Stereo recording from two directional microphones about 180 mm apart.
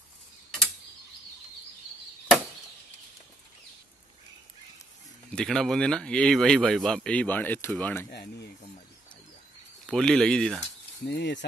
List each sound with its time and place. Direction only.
5.3 s speech: 5° left (ahead or behind)
8.1 s speech: 65° left (ahead or behind)
9.8 s speech: 5° left (ahead or behind)
11.1 s speech: 75° left (ahead or behind)